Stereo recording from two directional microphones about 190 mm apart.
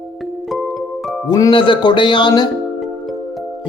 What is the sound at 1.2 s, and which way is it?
Speech, 20° left (ahead or behind).